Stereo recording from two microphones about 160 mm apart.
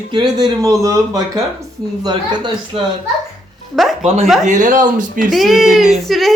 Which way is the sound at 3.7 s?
Centre (ahead or behind).